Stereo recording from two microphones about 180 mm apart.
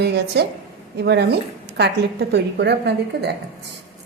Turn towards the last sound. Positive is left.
turn(degrees=-65)  # may be behind; listen again after turning